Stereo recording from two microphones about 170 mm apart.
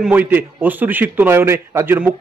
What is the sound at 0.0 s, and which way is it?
A man's voice, 10° right (ahead or behind).